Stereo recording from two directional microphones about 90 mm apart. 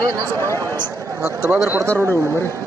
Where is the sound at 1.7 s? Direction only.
30° right (ahead or behind).